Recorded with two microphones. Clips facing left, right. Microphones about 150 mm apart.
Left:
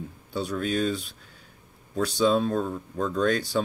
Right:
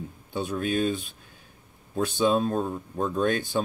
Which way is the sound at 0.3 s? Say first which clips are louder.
Even; 20° right (ahead or behind).